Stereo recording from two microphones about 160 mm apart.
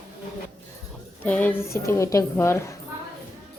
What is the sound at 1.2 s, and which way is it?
A woman's voice, 10° left (ahead or behind).